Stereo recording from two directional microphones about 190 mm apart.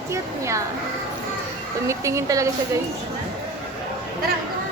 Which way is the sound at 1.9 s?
15° right (ahead or behind).